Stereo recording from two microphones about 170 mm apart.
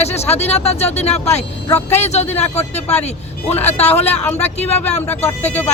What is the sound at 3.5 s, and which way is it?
Speech, 10° left (ahead or behind).